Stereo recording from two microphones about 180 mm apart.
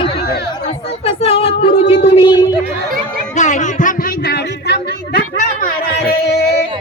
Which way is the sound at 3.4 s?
45° left (ahead or behind).